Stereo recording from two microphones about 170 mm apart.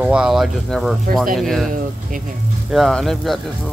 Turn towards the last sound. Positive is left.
turn(degrees=0)  # may be behind; listen again after turning